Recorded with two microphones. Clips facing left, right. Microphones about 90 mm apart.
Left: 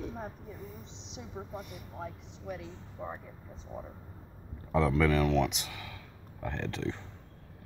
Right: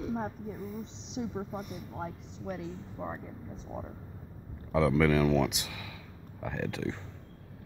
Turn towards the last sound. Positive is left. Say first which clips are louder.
# right 1 dB
turn(degrees=-10)  # may be behind; listen again after turning